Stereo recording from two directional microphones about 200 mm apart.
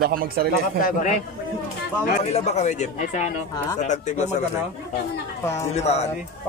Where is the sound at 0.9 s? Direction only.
40° left (ahead or behind).